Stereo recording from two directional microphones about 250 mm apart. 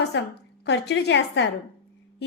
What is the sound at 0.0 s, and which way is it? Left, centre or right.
A woman's voice, left.